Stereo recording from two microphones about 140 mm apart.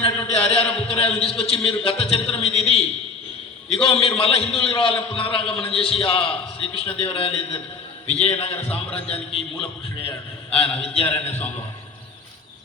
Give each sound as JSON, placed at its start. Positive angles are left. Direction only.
{"t": 0.3, "sound": "a sound", "side_deg": 45}
{"t": 0.9, "sound": "a man's voice", "side_deg": 45}
{"t": 11.0, "sound": "a man's voice", "side_deg": 15}